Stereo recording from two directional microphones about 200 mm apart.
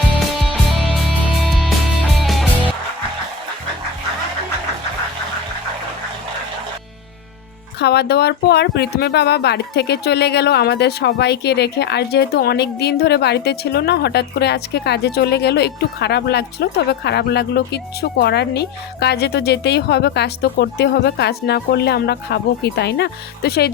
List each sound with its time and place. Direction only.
1.0 s music: centre (ahead or behind)
7.8 s speech: 55° left (ahead or behind)